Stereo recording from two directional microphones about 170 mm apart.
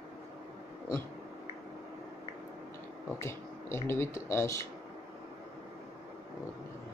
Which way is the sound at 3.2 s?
15° left (ahead or behind).